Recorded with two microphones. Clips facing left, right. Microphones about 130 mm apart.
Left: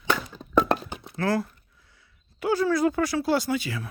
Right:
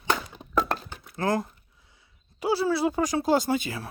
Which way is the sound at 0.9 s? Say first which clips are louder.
Left 6 dB; 25° left (ahead or behind).